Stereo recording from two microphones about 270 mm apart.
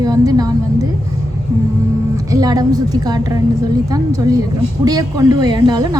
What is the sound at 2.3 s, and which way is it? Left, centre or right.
Speech, centre.